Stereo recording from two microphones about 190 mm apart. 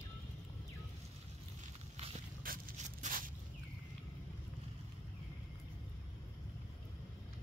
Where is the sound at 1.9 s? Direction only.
35° right (ahead or behind).